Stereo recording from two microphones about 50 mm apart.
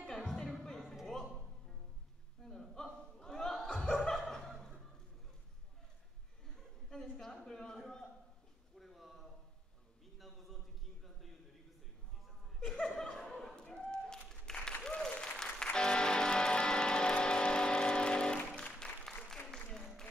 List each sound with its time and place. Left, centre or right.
0.0 s music: centre
2.4 s chuckle: centre
6.9 s a sound: centre
12.5 s chuckle: centre
13.6 s a sound: centre
15.0 s music: centre
19.5 s applause: centre